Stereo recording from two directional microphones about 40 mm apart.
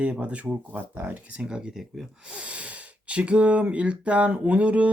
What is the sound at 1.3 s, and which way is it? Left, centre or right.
Speech, right.